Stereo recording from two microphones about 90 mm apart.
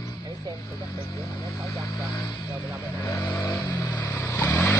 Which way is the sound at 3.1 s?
35° left (ahead or behind).